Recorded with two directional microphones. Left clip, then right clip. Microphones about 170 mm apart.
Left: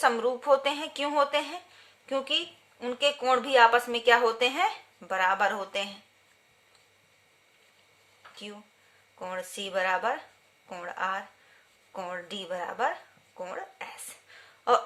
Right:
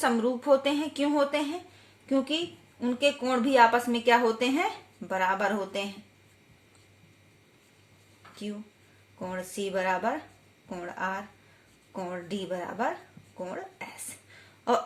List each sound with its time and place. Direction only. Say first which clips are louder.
0.0 s a woman's voice: left 2 dB; 35° left (ahead or behind)
9.1 s a woman's voice: even; 40° left (ahead or behind)